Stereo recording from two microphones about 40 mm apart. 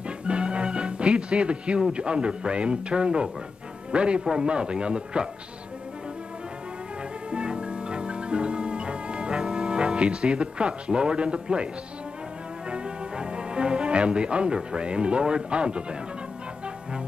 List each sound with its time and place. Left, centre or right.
0.3 s music: right
1.8 s speech: right
7.2 s music: right
12.6 s speech: right